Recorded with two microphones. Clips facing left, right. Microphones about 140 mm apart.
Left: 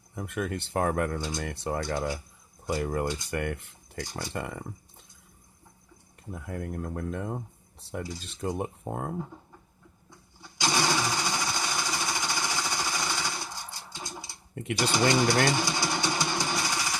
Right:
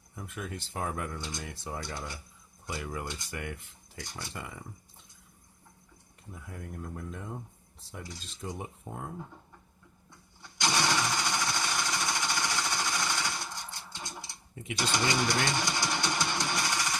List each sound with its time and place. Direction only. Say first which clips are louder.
0.2 s speech: left 8 dB; 65° left (ahead or behind)
1.9 s speech: left 10 dB; 75° left (ahead or behind)
2.6 s speech: left 9 dB; 45° left (ahead or behind)
3.2 s speech: left 8 dB; 60° left (ahead or behind)
4.1 s speech: left 7 dB; 45° left (ahead or behind)
6.3 s speech: left 8 dB; 60° left (ahead or behind)
10.4 s sewing machine: left 2 dB; 10° left (ahead or behind)
14.5 s speech: left 7 dB; 60° left (ahead or behind)
15.4 s jackhammer: left 4 dB; 10° left (ahead or behind)